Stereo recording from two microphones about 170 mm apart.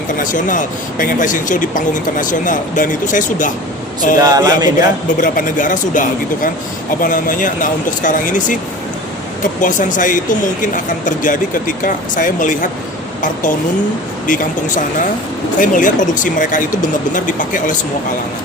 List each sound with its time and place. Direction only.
0.2 s speech: 50° left (ahead or behind)
4.2 s a man's voice: 20° right (ahead or behind)
5.2 s speech: 50° left (ahead or behind)
9.6 s speech: 50° left (ahead or behind)
14.3 s speech: 50° left (ahead or behind)